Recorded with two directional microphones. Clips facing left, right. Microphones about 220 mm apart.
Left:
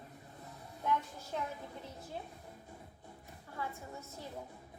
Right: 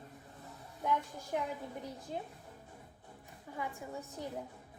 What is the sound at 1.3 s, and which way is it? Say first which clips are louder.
Speech: right 3 dB; 15° right (ahead or behind).